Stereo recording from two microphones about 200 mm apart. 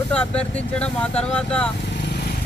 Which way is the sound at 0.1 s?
5° left (ahead or behind).